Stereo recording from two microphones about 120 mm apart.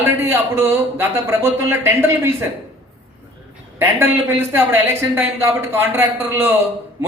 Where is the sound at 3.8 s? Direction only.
20° right (ahead or behind).